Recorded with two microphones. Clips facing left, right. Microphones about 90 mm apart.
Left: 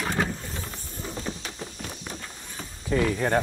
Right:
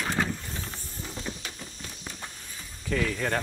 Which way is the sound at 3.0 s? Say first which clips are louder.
Left 6 dB; 25° left (ahead or behind).